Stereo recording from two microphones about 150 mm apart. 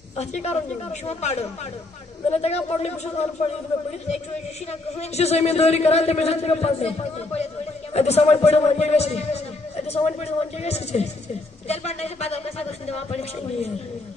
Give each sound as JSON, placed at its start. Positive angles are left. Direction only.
{"t": 0.2, "sound": "a man's voice", "side_deg": 45}
{"t": 4.9, "sound": "a man's voice", "side_deg": 45}
{"t": 11.6, "sound": "a sound", "side_deg": 45}